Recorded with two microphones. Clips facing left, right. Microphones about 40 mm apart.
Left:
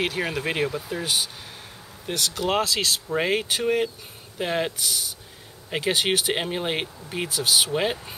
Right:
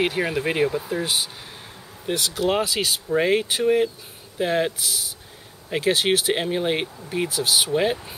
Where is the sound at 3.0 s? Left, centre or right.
Centre.